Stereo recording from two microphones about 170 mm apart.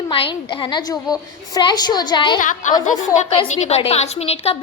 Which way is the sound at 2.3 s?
50° left (ahead or behind).